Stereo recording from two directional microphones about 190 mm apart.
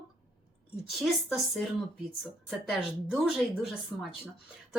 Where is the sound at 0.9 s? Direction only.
Centre (ahead or behind).